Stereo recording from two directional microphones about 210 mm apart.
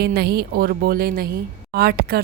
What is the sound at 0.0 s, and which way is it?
Speech, 50° right (ahead or behind).